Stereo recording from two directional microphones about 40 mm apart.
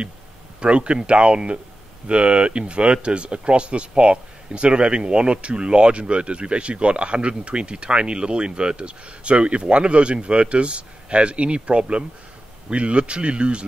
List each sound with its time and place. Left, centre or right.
0.6 s speech: right